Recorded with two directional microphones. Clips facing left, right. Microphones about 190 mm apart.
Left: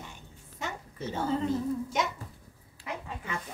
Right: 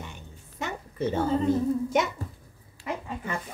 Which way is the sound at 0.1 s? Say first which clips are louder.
Right 4 dB; 65° right (ahead or behind).